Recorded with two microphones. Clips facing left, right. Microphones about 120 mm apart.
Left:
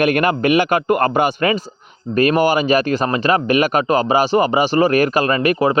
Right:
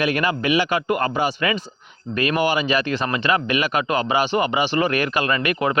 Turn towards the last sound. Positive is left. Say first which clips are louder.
# left 5 dB
turn(degrees=35)  # may be behind; listen again after turning